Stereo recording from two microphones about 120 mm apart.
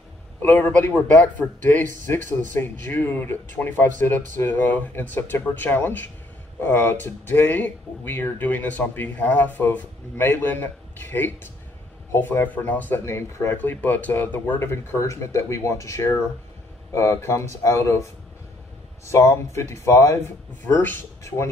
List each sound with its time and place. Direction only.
0.4 s speech: 15° left (ahead or behind)
19.0 s speech: 25° left (ahead or behind)